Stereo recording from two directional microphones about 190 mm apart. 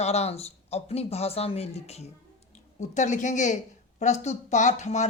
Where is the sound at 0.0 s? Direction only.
35° left (ahead or behind).